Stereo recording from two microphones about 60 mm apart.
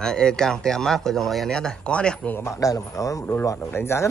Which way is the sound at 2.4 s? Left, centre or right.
Left.